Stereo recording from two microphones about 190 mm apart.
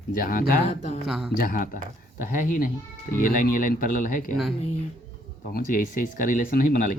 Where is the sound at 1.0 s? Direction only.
Centre (ahead or behind).